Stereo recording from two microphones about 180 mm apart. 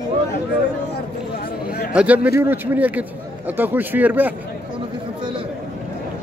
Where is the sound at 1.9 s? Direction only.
10° right (ahead or behind).